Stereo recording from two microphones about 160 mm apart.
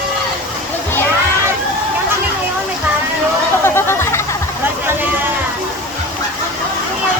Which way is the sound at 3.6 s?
15° left (ahead or behind).